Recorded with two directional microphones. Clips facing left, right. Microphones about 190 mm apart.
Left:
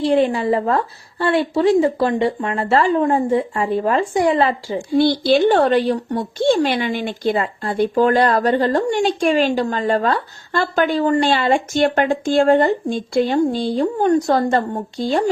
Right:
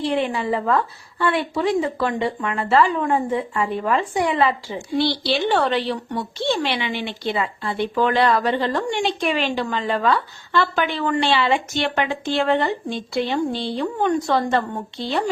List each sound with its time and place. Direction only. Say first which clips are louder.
0.0 s speech: left 6 dB; 35° left (ahead or behind)